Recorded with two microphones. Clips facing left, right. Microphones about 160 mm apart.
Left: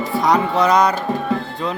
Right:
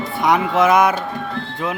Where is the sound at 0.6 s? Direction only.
5° right (ahead or behind).